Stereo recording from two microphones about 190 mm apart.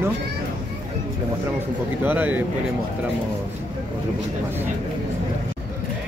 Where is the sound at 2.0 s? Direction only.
10° right (ahead or behind).